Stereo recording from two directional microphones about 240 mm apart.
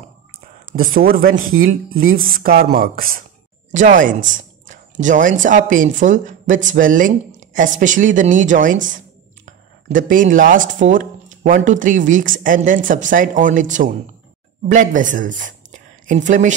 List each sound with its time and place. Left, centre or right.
0.8 s speech: right
1.3 s speech: right
1.6 s speech: right
4.3 s a sound: right
5.4 s speech: right